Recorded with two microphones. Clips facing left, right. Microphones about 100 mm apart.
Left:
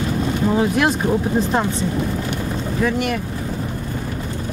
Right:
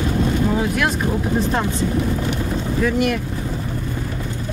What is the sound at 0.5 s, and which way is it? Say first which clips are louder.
Speech: left 3 dB; 25° left (ahead or behind).